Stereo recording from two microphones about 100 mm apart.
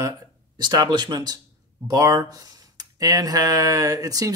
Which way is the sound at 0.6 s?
45° right (ahead or behind).